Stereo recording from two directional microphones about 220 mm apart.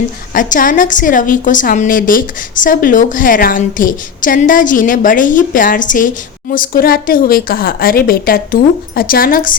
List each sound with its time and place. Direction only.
0.3 s a woman's voice: 35° left (ahead or behind)